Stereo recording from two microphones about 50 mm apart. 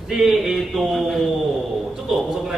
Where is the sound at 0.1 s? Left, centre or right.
Centre.